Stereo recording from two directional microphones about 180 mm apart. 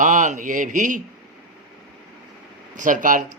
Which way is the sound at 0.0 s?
45° right (ahead or behind).